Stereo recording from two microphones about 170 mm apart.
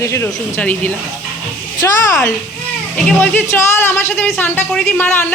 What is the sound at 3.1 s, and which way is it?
Speech, 15° left (ahead or behind).